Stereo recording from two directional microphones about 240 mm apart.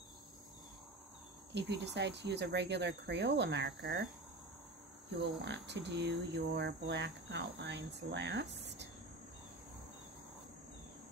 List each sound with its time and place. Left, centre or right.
1.5 s speech: right
5.2 s speech: right